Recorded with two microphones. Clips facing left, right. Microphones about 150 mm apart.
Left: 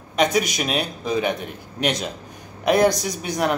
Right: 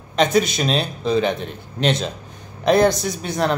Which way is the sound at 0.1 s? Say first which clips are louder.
Right 3 dB; 15° left (ahead or behind).